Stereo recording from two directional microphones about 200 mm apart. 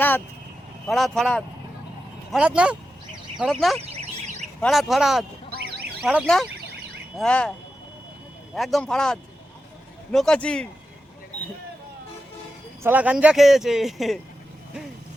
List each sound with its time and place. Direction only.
0.9 s speech: centre (ahead or behind)
3.8 s vehicle: 30° right (ahead or behind)
4.6 s speech: centre (ahead or behind)
8.5 s speech: centre (ahead or behind)
12.8 s speech: 10° right (ahead or behind)